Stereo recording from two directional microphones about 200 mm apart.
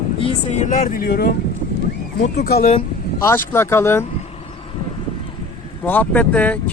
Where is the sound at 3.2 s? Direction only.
10° left (ahead or behind).